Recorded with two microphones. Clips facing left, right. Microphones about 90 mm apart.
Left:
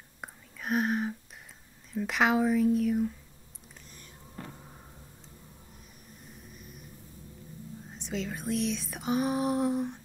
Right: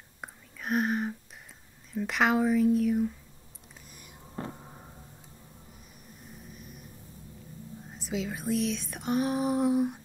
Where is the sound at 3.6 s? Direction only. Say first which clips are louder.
Even; 5° right (ahead or behind).